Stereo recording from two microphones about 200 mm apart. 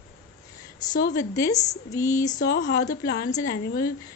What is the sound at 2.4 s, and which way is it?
Speech, 55° left (ahead or behind).